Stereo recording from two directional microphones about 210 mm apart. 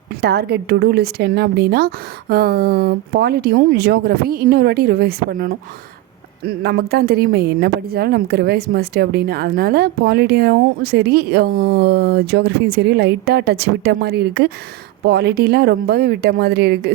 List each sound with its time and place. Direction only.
0.2 s speech: 50° right (ahead or behind)